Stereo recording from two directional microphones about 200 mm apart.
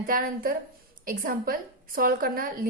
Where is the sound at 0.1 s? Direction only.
45° right (ahead or behind).